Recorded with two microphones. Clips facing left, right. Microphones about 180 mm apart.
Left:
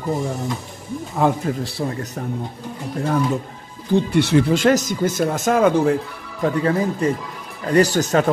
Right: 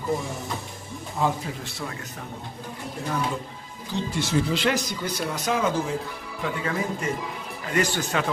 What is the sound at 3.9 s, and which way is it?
Speech, 60° left (ahead or behind).